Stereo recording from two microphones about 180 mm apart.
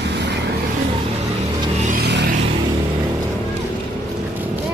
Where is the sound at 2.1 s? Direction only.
65° right (ahead or behind).